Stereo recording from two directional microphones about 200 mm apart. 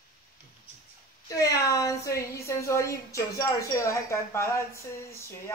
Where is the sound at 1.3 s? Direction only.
15° left (ahead or behind).